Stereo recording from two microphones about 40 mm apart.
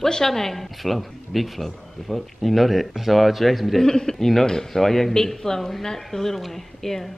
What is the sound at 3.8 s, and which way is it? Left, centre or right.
Speech, centre.